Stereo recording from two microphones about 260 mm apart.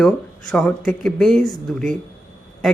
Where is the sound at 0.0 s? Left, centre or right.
Centre.